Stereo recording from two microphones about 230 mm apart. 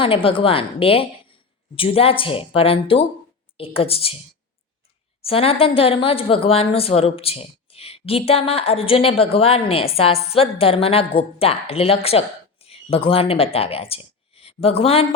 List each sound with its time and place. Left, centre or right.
0.0 s a woman's voice: left
5.2 s a woman's voice: left